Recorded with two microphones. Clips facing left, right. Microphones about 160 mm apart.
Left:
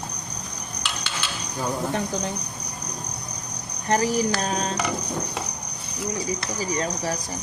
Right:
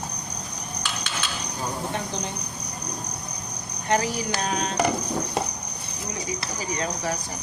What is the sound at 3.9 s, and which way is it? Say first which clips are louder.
Speech: left 3 dB; 40° left (ahead or behind).